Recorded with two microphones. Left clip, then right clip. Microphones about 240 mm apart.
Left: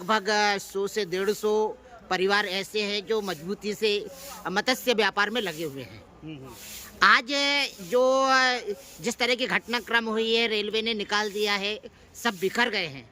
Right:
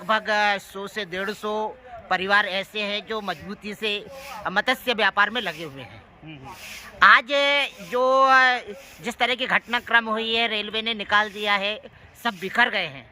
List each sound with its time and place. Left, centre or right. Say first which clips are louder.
0.1 s speech: right 2 dB; centre
7.0 s speech: right 5 dB; centre